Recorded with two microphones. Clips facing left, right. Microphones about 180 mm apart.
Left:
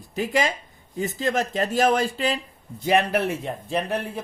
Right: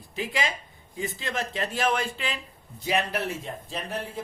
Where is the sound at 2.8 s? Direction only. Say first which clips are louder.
Left 6 dB; 55° left (ahead or behind).